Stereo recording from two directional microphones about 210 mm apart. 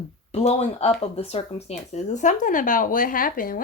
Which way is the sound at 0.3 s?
30° left (ahead or behind).